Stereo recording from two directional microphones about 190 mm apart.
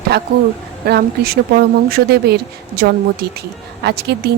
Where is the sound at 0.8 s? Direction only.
55° right (ahead or behind).